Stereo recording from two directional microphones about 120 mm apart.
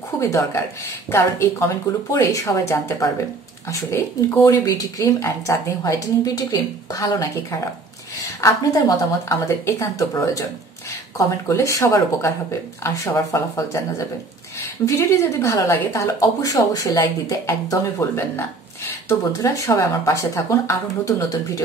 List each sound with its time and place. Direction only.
0.2 s speech: 25° left (ahead or behind)
8.4 s speech: 25° left (ahead or behind)